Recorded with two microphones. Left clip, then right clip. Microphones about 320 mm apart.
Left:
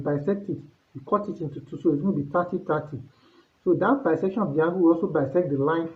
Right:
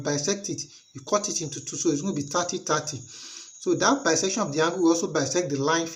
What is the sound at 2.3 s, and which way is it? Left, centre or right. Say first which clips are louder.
Speech: even; left.